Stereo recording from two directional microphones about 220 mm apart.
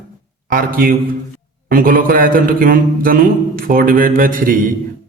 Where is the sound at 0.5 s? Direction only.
40° right (ahead or behind).